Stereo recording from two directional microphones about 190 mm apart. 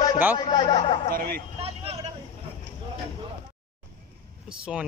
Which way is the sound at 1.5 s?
30° right (ahead or behind).